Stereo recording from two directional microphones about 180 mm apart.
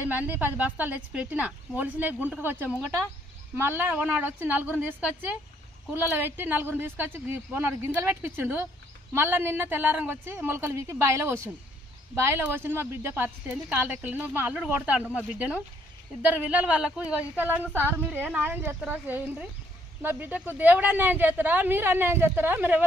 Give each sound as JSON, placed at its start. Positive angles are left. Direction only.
{"t": 0.0, "sound": "a woman's voice", "side_deg": -10}